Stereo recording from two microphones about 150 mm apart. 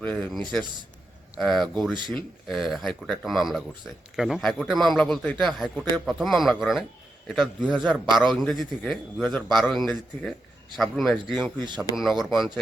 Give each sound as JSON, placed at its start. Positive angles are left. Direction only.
{"t": 0.0, "sound": "speech", "side_deg": 10}
{"t": 1.9, "sound": "speech", "side_deg": -30}
{"t": 2.5, "sound": "speech", "side_deg": 0}